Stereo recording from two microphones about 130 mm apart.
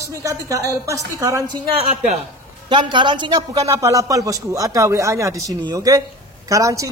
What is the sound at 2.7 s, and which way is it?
A woman's voice, 40° right (ahead or behind).